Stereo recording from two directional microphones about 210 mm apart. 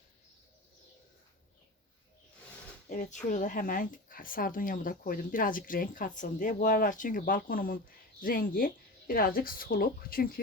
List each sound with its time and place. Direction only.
2.9 s speech: 35° left (ahead or behind)